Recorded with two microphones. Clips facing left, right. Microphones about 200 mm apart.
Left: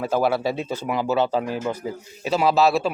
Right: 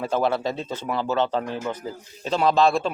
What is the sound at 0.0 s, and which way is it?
Speech, 5° left (ahead or behind).